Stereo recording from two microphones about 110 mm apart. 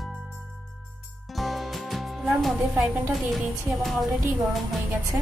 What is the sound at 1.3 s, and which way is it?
Music, centre (ahead or behind).